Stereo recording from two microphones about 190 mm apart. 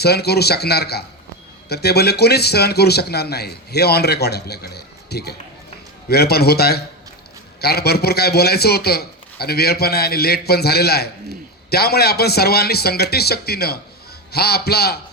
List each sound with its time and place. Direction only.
0.0 s a man's voice: 60° left (ahead or behind)